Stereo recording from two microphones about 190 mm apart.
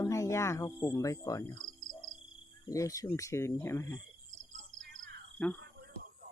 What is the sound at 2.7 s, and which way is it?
Speech, 15° left (ahead or behind).